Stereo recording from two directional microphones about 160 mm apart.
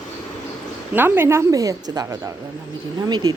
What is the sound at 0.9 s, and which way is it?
A woman's voice, 15° right (ahead or behind).